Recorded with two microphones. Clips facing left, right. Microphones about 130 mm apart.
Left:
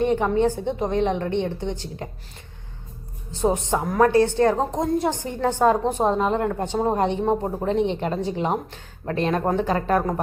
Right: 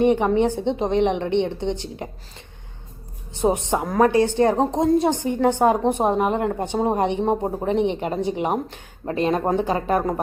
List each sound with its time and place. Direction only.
0.0 s a woman's voice: 15° right (ahead or behind)
3.3 s a woman's voice: 20° right (ahead or behind)